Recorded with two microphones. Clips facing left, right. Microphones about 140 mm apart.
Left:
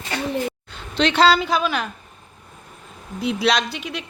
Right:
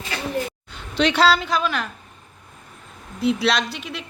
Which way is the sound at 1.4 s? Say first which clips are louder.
Left 2 dB; centre (ahead or behind).